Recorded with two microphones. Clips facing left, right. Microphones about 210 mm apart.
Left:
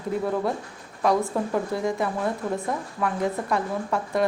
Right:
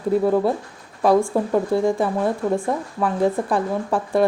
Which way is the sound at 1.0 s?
30° right (ahead or behind).